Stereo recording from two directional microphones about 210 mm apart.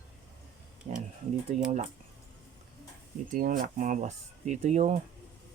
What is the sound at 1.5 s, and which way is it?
Speech, 35° right (ahead or behind).